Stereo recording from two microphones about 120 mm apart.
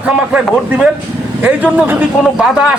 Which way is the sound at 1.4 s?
10° right (ahead or behind).